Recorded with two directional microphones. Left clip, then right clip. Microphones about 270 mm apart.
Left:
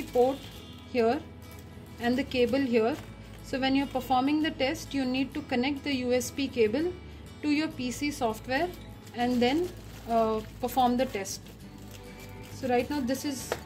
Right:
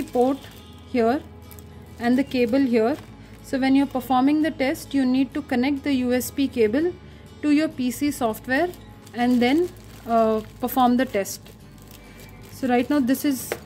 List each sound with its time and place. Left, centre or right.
0.9 s a woman's voice: right
12.5 s speech: right